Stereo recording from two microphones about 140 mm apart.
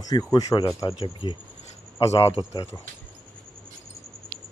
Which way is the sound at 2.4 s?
30° left (ahead or behind).